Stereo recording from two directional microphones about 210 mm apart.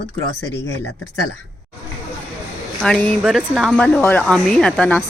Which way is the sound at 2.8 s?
5° left (ahead or behind).